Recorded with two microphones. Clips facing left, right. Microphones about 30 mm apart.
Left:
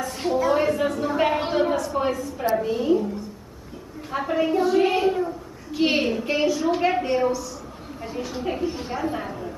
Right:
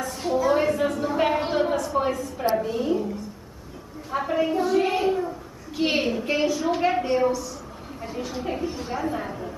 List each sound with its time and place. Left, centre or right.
0.5 s a sound: centre
2.6 s a woman's voice: centre
4.1 s a woman's voice: centre